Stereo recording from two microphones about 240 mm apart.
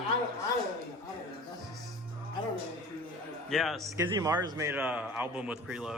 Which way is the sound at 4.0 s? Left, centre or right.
Centre.